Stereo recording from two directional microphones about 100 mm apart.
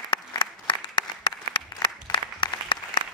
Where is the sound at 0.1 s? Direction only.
50° left (ahead or behind).